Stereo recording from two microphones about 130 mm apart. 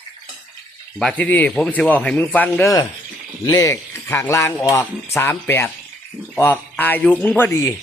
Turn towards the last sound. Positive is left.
turn(degrees=10)  # may be behind; listen again after turning